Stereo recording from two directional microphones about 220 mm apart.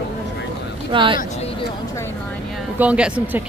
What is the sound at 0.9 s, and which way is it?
Speech, 20° right (ahead or behind).